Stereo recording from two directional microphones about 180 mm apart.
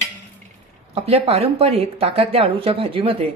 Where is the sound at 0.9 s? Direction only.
35° right (ahead or behind).